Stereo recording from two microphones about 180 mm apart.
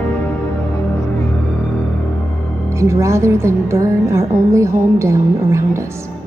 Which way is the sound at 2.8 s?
15° right (ahead or behind).